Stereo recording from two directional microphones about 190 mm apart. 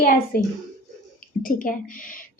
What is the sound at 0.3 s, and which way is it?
A woman's voice, 50° left (ahead or behind).